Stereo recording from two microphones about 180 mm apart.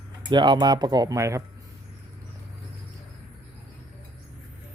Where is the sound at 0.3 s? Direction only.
25° right (ahead or behind).